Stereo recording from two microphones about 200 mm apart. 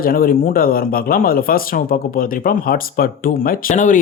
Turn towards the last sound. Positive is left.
turn(degrees=40)  # may be behind; listen again after turning